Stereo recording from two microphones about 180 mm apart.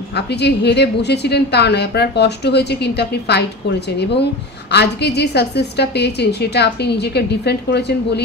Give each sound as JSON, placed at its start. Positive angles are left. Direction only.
{"t": 0.1, "sound": "a woman's voice", "side_deg": 70}